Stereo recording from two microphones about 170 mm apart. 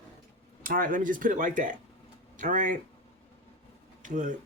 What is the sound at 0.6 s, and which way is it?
Speech, 55° right (ahead or behind).